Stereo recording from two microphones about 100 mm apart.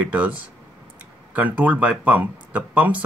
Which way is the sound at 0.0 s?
15° right (ahead or behind).